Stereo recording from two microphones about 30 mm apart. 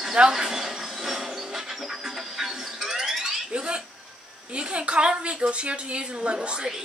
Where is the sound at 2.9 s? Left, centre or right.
Centre.